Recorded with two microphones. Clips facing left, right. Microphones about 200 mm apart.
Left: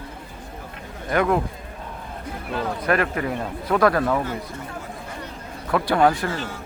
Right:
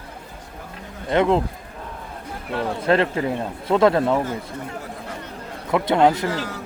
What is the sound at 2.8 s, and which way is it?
Speech, 25° right (ahead or behind).